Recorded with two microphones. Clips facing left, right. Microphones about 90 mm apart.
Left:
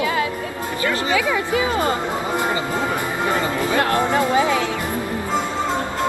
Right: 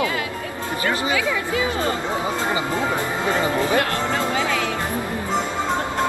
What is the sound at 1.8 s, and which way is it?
Music, 15° left (ahead or behind).